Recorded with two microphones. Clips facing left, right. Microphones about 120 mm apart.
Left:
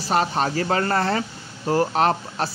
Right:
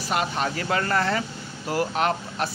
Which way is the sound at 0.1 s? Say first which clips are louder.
Left 4 dB; 35° left (ahead or behind).